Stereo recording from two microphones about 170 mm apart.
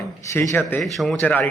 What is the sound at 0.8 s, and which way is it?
Speech, centre (ahead or behind).